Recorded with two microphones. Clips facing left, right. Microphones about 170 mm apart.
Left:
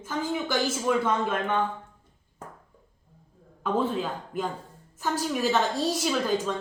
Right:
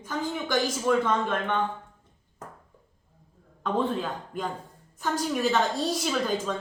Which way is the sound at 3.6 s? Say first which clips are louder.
Left 1 dB; 5° left (ahead or behind).